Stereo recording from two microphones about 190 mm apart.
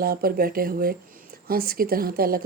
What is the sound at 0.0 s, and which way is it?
Speech, 50° right (ahead or behind).